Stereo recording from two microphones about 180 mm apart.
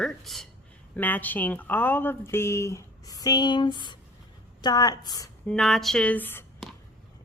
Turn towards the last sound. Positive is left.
turn(degrees=10)  # may be behind; listen again after turning